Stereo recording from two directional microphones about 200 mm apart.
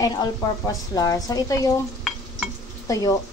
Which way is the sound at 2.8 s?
15° left (ahead or behind).